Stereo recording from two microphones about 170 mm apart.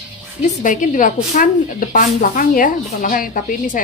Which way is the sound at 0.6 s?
50° left (ahead or behind).